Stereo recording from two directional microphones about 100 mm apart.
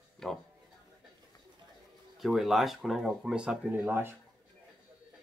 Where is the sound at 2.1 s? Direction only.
Centre (ahead or behind); by 4.1 s 20° right (ahead or behind).